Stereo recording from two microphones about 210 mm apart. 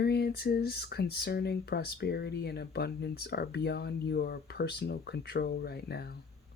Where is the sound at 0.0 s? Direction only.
50° left (ahead or behind).